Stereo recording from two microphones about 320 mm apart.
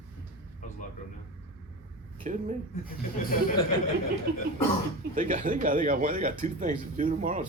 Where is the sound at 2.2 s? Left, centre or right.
Right.